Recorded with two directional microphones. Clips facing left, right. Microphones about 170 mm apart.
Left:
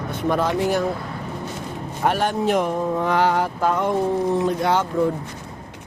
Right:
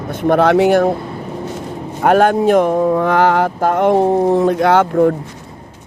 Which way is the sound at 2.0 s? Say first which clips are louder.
Right 9 dB; 65° right (ahead or behind).